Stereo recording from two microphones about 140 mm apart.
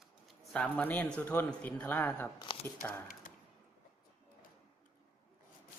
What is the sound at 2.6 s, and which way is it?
Speech, 15° left (ahead or behind).